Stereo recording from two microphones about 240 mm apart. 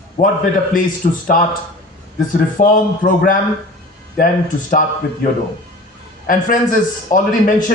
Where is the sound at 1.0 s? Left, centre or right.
Left.